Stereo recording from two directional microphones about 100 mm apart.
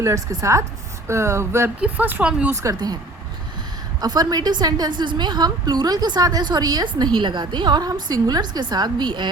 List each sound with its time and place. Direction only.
0.0 s a woman's voice: 30° right (ahead or behind)
1.0 s a sound: 30° right (ahead or behind)
1.8 s speech: 20° right (ahead or behind)
2.5 s a woman's voice: 30° right (ahead or behind)
2.7 s a woman's voice: 40° right (ahead or behind)
4.0 s a woman's voice: 40° right (ahead or behind)
7.2 s a woman's voice: 50° right (ahead or behind)